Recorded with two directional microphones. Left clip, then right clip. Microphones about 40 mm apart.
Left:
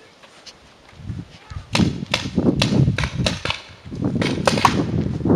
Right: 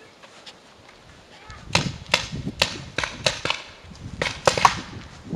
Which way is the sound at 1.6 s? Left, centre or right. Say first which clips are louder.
Left 1 dB; right.